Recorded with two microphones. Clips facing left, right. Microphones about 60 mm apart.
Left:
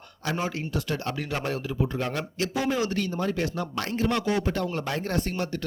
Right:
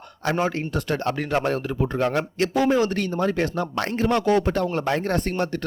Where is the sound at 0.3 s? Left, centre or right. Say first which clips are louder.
Right 6 dB; right.